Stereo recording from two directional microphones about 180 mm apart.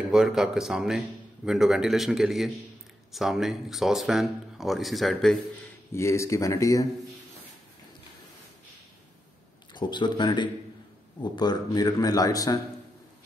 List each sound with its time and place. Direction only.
0.1 s a man's voice: 5° right (ahead or behind)
5.9 s speech: 15° left (ahead or behind)
9.8 s speech: 25° left (ahead or behind)